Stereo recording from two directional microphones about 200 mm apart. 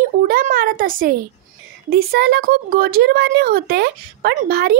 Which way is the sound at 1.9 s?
50° right (ahead or behind).